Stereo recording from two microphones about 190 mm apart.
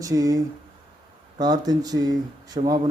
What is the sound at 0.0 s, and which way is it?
Speech, 20° right (ahead or behind).